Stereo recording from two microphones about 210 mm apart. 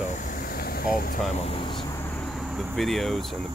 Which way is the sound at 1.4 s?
25° left (ahead or behind).